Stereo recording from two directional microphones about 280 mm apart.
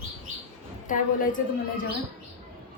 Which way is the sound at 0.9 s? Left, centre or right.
Left.